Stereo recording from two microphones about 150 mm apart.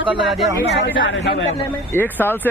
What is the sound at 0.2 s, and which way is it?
Speech, centre (ahead or behind).